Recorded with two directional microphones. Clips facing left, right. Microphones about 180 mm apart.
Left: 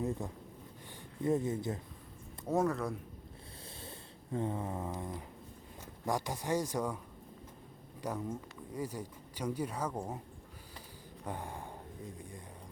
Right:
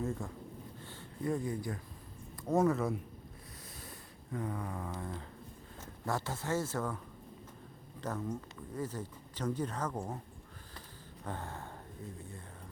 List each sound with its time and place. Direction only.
0.0 s speech: 15° left (ahead or behind)
2.5 s speech: centre (ahead or behind)
3.8 s a sound: 25° left (ahead or behind)
5.8 s speech: 15° left (ahead or behind)
8.0 s speech: 10° left (ahead or behind)
11.3 s speech: 15° left (ahead or behind)